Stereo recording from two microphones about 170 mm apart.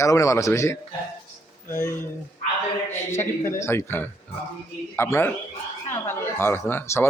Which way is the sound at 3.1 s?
15° left (ahead or behind).